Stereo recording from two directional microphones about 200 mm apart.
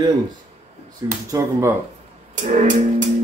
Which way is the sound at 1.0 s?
20° right (ahead or behind).